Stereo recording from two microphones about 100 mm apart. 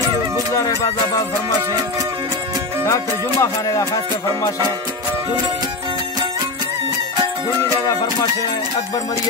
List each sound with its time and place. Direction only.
0.5 s music: 35° left (ahead or behind)
1.7 s music: 35° right (ahead or behind)
2.8 s music: 35° left (ahead or behind)
8.0 s music: 40° left (ahead or behind)